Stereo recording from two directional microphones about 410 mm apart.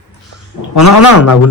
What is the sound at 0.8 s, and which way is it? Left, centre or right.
Music, left.